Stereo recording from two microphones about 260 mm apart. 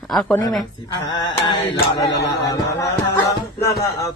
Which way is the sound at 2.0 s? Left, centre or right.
Left.